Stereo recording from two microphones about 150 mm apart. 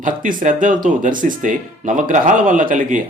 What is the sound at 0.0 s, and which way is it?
Speech, 65° right (ahead or behind).